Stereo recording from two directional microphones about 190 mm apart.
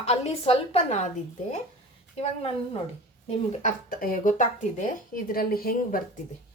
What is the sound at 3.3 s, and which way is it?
A woman's voice, 45° left (ahead or behind).